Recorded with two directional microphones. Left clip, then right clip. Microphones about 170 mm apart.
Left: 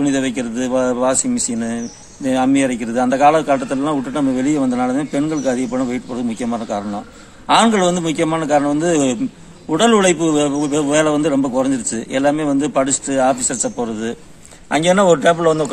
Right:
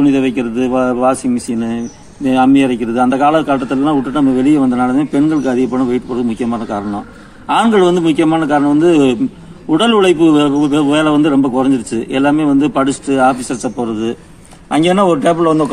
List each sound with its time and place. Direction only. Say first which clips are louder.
0.0 s a man's voice: right 6 dB; 25° left (ahead or behind)
2.2 s a man's voice: right 5 dB; 25° left (ahead or behind)